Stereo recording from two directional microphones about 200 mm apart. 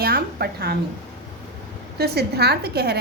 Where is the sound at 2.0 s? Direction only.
50° right (ahead or behind).